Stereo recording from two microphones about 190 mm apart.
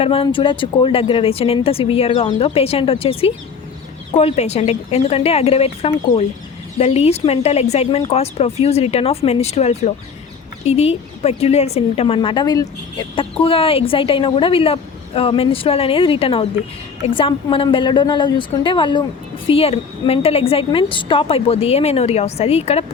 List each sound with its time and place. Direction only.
0.0 s a woman's voice: 30° left (ahead or behind)